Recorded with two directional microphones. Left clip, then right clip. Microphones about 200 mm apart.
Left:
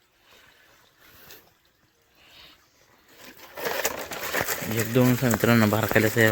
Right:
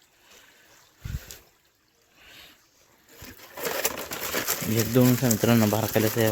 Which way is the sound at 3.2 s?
60° right (ahead or behind).